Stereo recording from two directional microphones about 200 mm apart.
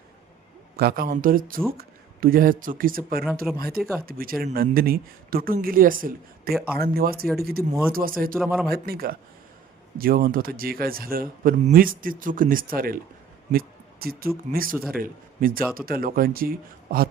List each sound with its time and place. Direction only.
0.8 s a man's voice: 50° right (ahead or behind)
3.5 s speech: 5° right (ahead or behind)
4.0 s a man's voice: 45° right (ahead or behind)
8.4 s speech: centre (ahead or behind)
8.6 s a man's voice: 50° right (ahead or behind)
13.5 s a sound: 50° right (ahead or behind)
14.5 s a man's voice: 45° right (ahead or behind)